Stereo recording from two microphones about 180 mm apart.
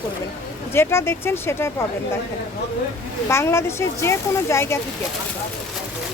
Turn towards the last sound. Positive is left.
turn(degrees=15)  # may be behind; listen again after turning